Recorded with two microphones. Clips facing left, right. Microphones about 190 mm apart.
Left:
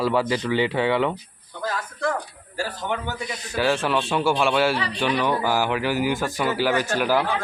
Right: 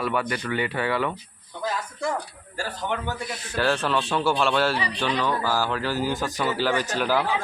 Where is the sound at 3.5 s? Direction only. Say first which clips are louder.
Left 2 dB; 10° left (ahead or behind).